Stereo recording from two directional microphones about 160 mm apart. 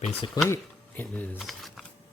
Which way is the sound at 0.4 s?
15° left (ahead or behind).